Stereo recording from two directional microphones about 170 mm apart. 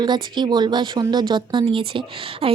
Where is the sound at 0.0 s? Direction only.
25° right (ahead or behind).